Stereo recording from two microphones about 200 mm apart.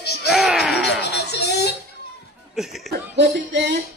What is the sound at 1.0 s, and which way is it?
Laughter, 55° left (ahead or behind).